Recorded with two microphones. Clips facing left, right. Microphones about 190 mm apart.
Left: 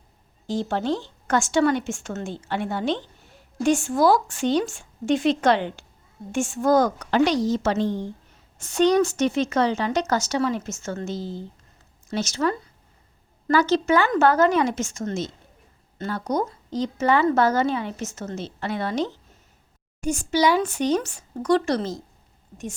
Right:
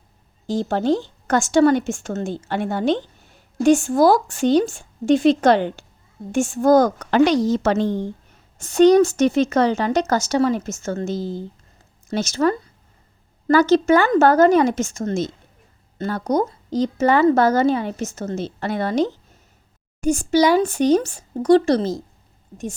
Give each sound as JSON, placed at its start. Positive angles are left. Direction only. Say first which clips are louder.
{"t": 0.4, "sound": "a woman's voice", "louder": "right 5 dB", "side_deg": -40}
{"t": 8.6, "sound": "a woman's voice", "louder": "right 6 dB", "side_deg": -40}